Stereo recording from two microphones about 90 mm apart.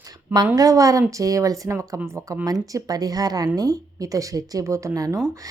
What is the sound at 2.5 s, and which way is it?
A woman's voice, 45° right (ahead or behind).